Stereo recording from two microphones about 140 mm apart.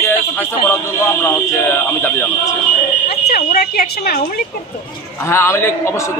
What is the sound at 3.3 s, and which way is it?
Speech, 90° left.